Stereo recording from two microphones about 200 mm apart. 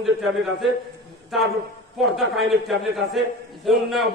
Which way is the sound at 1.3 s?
Centre (ahead or behind).